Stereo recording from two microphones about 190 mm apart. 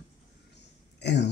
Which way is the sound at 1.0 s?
65° left (ahead or behind).